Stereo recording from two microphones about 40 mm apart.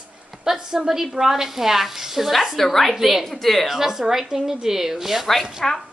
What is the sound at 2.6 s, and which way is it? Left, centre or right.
A woman's voice, centre.